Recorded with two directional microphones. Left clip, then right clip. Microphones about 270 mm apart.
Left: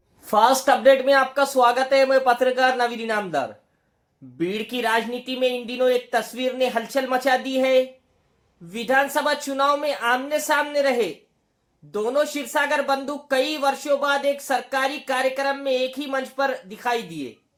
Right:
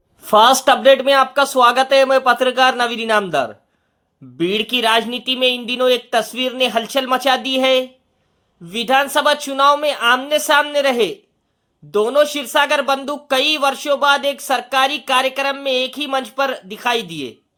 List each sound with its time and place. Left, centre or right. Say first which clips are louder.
0.3 s speech: right 6 dB; right